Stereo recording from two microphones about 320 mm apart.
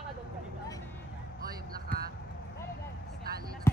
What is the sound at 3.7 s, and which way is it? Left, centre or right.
Music, centre.